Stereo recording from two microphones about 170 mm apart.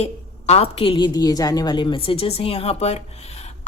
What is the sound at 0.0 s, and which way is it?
A woman's voice, 40° left (ahead or behind).